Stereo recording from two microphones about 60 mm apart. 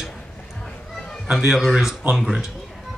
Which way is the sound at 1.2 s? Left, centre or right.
Centre.